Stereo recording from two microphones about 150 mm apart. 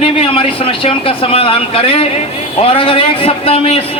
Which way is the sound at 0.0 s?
35° left (ahead or behind).